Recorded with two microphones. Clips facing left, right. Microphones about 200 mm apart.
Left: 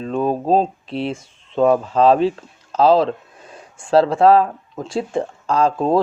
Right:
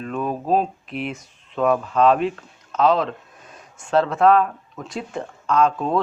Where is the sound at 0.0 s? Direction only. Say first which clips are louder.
Left 6 dB; 30° left (ahead or behind).